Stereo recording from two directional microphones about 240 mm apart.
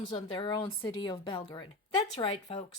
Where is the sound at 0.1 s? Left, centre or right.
Left.